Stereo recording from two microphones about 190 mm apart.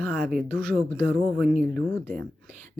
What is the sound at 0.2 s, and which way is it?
Speech, 5° right (ahead or behind).